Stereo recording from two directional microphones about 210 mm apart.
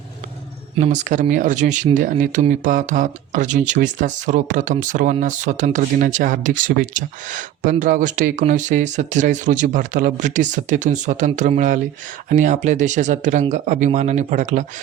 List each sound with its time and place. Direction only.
0.8 s speech: 35° right (ahead or behind)